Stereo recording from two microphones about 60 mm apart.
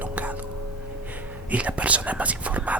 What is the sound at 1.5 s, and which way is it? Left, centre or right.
Speech, right.